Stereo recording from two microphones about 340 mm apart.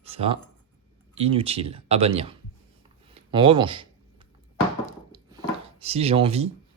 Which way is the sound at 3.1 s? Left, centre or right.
Centre.